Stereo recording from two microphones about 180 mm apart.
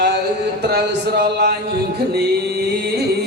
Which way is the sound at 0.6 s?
65° right (ahead or behind).